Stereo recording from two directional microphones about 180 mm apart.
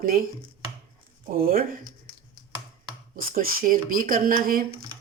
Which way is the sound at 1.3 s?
55° right (ahead or behind).